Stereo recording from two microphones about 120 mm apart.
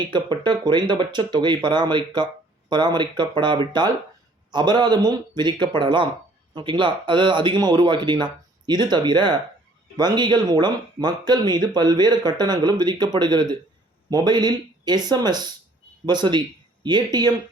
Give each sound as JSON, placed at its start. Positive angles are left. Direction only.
{"t": 0.0, "sound": "speech", "side_deg": -40}